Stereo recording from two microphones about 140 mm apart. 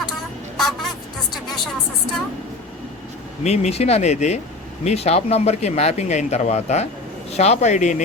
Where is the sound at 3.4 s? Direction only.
50° left (ahead or behind).